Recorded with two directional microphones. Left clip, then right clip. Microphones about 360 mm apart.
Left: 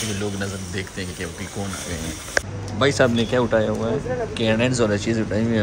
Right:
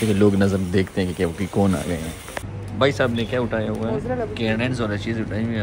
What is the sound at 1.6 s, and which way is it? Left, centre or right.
Speech, right.